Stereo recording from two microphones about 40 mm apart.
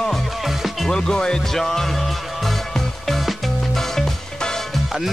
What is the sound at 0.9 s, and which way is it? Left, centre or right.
Speech, centre.